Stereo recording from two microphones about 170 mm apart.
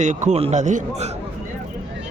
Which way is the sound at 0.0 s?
45° right (ahead or behind).